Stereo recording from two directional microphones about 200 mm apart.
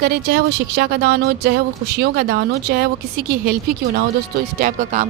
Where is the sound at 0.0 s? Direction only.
50° right (ahead or behind).